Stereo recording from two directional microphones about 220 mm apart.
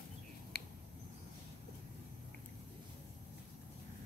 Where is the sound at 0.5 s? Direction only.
45° left (ahead or behind).